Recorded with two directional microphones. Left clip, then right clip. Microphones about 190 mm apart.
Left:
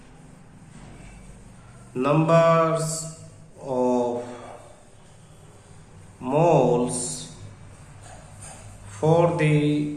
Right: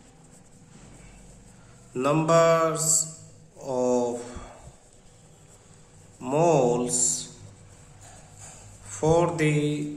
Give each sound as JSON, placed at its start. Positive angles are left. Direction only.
{"t": 1.9, "sound": "mantra", "side_deg": -40}
{"t": 6.2, "sound": "mantra", "side_deg": -40}
{"t": 8.9, "sound": "mantra", "side_deg": -40}